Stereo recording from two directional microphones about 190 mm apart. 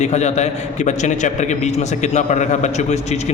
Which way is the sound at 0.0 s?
35° left (ahead or behind).